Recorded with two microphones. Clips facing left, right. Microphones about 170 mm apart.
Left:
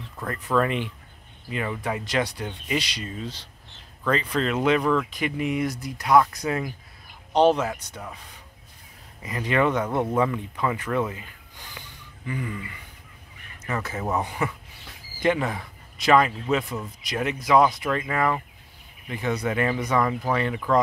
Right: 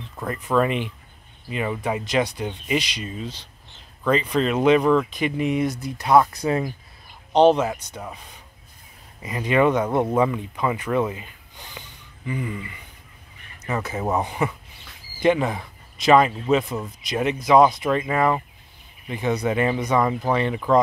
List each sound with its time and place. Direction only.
0.2 s speech: 15° right (ahead or behind)